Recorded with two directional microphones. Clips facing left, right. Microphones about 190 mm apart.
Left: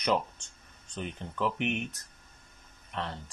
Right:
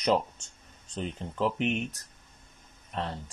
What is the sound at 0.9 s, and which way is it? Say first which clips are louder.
Speech: right 3 dB; 35° right (ahead or behind).